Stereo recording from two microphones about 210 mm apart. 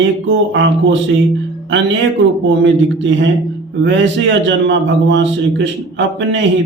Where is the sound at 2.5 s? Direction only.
60° right (ahead or behind).